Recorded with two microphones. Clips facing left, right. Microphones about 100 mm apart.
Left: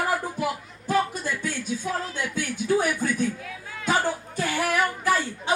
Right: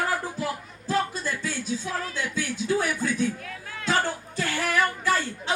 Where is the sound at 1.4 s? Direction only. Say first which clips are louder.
Left 1 dB; 55° left (ahead or behind).